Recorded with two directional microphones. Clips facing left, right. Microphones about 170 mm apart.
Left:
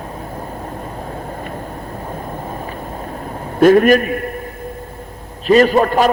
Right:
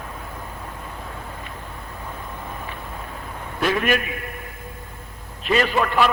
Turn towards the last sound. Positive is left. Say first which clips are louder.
# left 7 dB
turn(degrees=40)  # may be behind; listen again after turning